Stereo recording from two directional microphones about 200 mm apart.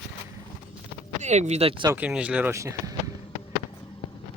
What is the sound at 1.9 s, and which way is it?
Speech, 5° right (ahead or behind).